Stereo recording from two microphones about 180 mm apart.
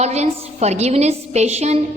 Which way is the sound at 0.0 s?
40° right (ahead or behind).